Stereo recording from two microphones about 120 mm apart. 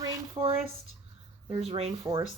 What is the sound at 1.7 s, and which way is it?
Speech, 60° right (ahead or behind).